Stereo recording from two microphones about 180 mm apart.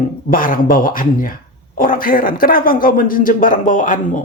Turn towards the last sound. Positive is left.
turn(degrees=45)  # may be behind; listen again after turning